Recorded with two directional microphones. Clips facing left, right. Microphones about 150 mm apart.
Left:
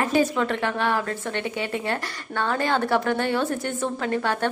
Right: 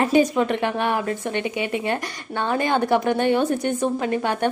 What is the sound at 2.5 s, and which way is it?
A woman's voice, 15° right (ahead or behind).